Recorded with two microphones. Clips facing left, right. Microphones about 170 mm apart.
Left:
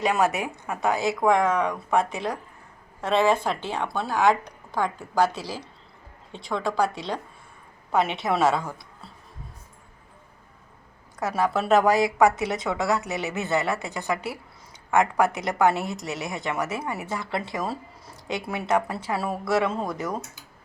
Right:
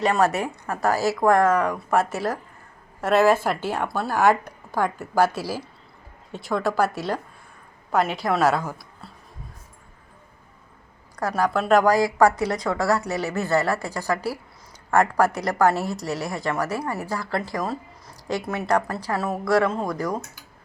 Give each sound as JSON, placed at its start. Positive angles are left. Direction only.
{"t": 0.0, "sound": "a woman's voice", "side_deg": 0}
{"t": 11.2, "sound": "a woman's voice", "side_deg": 0}
{"t": 11.9, "sound": "speech", "side_deg": 25}
{"t": 12.6, "sound": "a woman's voice", "side_deg": 0}
{"t": 14.8, "sound": "a woman's voice", "side_deg": 0}